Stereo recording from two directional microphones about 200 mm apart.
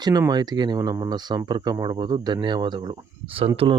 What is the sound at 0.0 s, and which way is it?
Speech, 20° right (ahead or behind).